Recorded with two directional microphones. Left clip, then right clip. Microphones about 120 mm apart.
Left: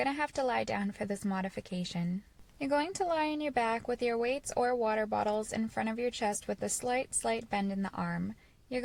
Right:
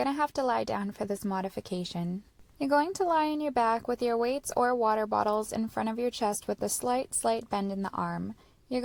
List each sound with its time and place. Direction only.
0.0 s a woman's voice: 30° right (ahead or behind)
7.8 s a woman's voice: 30° right (ahead or behind)